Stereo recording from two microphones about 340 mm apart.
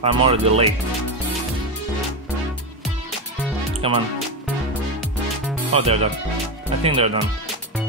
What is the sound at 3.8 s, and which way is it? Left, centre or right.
Speech, centre.